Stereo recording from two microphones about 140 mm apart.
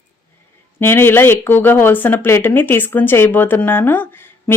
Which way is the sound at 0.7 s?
15° left (ahead or behind).